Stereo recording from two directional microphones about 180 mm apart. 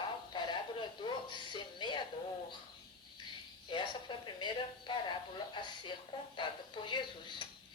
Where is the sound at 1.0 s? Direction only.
25° left (ahead or behind).